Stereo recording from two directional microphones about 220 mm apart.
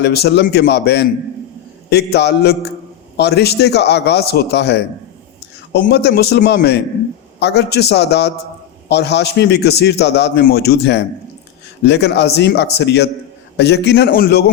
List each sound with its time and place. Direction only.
0.0 s a man's voice: 50° left (ahead or behind)